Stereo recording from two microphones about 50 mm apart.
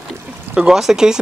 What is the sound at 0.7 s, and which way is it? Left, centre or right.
Speech, centre.